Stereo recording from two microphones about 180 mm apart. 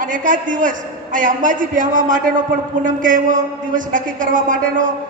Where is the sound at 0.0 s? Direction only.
45° right (ahead or behind).